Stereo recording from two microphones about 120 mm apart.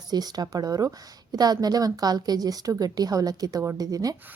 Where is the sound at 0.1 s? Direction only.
35° right (ahead or behind).